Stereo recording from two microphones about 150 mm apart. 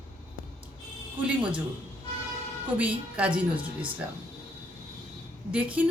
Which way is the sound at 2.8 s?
10° right (ahead or behind).